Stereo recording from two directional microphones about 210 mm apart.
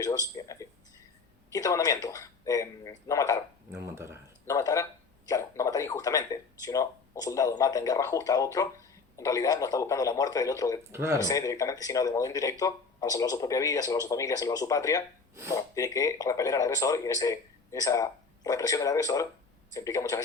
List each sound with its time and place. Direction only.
0.0 s speech: 15° left (ahead or behind)
3.7 s speech: 10° right (ahead or behind)
4.4 s speech: 15° left (ahead or behind)
10.9 s speech: 15° right (ahead or behind)
11.2 s speech: 15° left (ahead or behind)